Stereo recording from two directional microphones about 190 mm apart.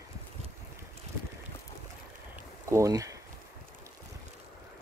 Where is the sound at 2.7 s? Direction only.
15° right (ahead or behind).